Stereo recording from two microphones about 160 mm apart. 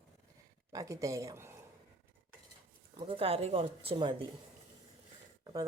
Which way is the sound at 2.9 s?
35° right (ahead or behind).